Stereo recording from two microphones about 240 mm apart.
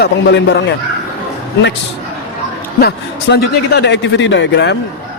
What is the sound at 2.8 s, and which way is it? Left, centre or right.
A man's voice, left.